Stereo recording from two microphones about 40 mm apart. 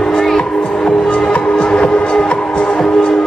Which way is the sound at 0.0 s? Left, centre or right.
Centre.